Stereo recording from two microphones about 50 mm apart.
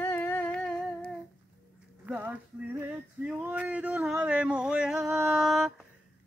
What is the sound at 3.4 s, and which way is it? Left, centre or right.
Speech, right.